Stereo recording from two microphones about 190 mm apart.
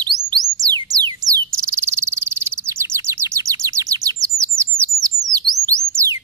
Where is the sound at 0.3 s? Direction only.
20° right (ahead or behind).